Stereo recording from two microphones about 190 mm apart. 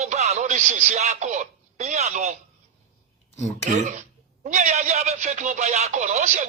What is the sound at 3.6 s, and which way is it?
Speech, 40° right (ahead or behind).